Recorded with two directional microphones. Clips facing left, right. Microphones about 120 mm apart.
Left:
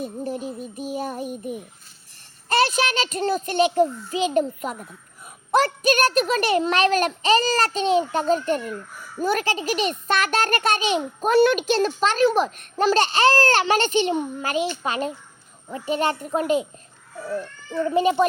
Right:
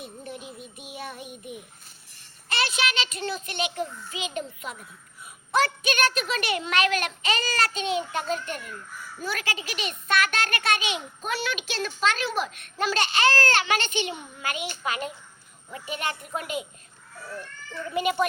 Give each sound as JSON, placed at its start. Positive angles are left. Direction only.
{"t": 0.0, "sound": "a child's voice", "side_deg": 40}
{"t": 17.2, "sound": "baby cry", "side_deg": 25}
{"t": 17.8, "sound": "a child's voice", "side_deg": 35}